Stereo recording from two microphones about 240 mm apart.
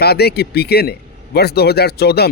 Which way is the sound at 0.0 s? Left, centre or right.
Left.